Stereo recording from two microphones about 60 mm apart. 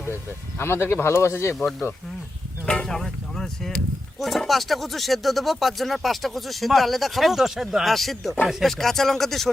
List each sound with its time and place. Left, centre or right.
0.6 s speech: left
2.8 s speech: centre